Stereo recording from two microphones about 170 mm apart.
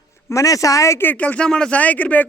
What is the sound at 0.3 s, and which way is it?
Speech, 20° left (ahead or behind).